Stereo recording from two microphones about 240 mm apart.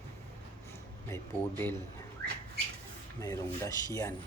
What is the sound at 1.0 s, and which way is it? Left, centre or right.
Speech, centre.